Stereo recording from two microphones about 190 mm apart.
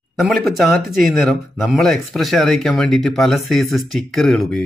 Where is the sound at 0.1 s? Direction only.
Centre (ahead or behind).